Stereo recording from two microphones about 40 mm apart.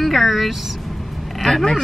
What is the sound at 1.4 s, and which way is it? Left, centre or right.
Speech, centre.